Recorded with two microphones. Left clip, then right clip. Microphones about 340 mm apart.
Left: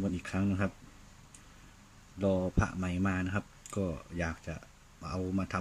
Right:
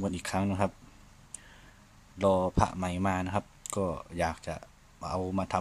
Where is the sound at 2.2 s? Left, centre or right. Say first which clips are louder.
Right 6 dB; right.